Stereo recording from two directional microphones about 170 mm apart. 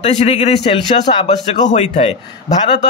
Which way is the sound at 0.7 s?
30° left (ahead or behind).